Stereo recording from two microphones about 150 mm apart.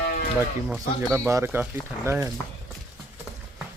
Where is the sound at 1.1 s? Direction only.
15° right (ahead or behind).